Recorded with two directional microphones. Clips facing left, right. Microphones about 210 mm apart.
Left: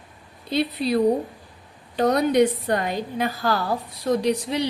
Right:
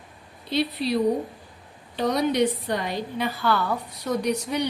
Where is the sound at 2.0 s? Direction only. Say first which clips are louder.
Left 4 dB; 50° left (ahead or behind).